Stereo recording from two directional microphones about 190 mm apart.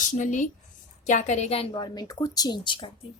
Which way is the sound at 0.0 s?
40° left (ahead or behind).